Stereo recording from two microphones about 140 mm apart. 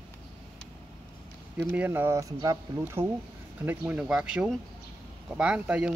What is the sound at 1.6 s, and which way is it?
Speech, 15° right (ahead or behind).